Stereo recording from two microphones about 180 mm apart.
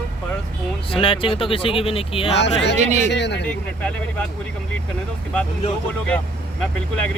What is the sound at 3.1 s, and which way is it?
Speech, 75° left (ahead or behind).